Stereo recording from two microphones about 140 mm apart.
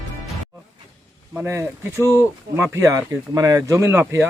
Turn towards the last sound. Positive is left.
turn(degrees=-20)  # may be behind; listen again after turning